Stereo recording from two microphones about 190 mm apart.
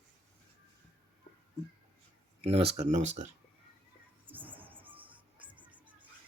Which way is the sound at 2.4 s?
30° right (ahead or behind).